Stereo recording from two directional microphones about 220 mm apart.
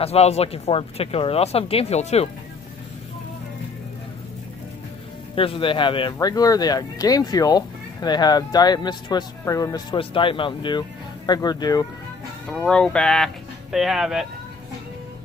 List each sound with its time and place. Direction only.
0.0 s speech: 30° left (ahead or behind)
5.3 s speech: 25° left (ahead or behind)
12.4 s speech: 5° left (ahead or behind)